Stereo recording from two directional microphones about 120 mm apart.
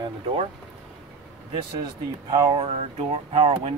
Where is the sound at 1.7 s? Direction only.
35° right (ahead or behind).